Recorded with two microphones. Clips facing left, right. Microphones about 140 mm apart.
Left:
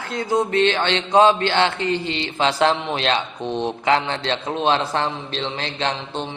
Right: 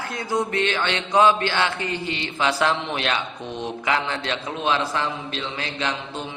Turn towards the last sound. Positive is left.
turn(degrees=30)  # may be behind; listen again after turning